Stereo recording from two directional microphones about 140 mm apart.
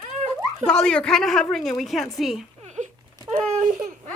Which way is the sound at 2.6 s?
55° right (ahead or behind).